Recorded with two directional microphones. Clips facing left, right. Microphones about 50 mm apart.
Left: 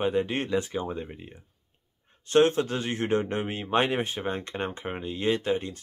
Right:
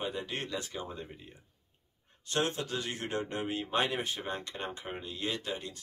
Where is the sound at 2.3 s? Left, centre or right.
Left.